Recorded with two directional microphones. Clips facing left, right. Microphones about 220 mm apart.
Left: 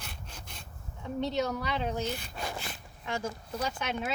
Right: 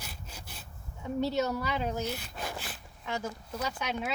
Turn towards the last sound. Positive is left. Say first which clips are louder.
# left 1 dB
turn(degrees=0)  # may be behind; listen again after turning